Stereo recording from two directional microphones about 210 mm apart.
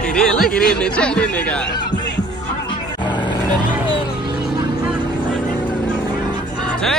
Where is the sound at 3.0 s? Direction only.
20° left (ahead or behind).